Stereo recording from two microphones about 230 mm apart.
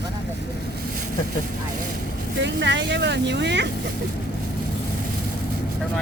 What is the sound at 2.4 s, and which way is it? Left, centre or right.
Speech, right.